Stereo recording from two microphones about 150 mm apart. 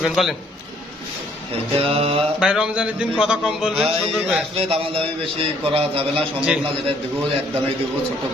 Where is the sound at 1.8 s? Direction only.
40° right (ahead or behind).